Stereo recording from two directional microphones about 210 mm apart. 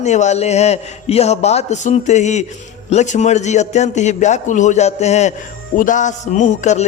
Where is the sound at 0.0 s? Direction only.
35° left (ahead or behind).